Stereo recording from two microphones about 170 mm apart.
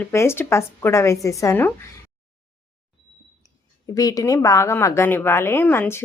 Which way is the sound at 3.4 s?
20° left (ahead or behind).